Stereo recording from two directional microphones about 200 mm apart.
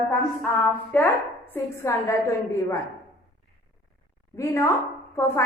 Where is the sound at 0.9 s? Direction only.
10° left (ahead or behind).